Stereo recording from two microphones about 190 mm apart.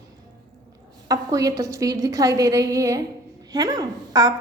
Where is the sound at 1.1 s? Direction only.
20° right (ahead or behind).